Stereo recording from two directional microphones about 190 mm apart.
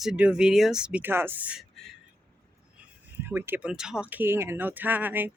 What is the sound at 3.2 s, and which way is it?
Speech, 10° right (ahead or behind).